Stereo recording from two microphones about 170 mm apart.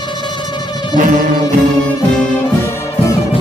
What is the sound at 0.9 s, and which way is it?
Music, 50° right (ahead or behind).